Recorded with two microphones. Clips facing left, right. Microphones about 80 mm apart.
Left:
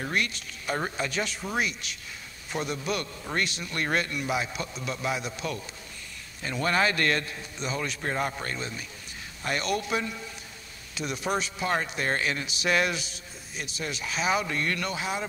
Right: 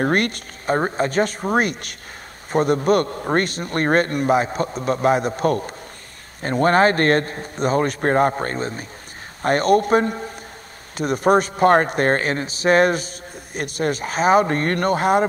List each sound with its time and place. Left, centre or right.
0.0 s a man's voice: right